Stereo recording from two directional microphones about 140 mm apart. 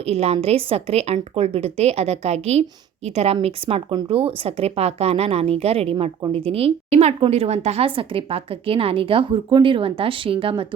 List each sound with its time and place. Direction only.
0.0 s a woman's voice: 45° right (ahead or behind)